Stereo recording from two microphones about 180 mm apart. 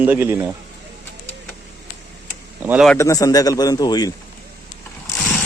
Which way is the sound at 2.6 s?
10° right (ahead or behind).